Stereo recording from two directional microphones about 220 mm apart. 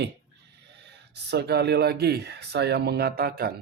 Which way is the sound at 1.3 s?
45° right (ahead or behind).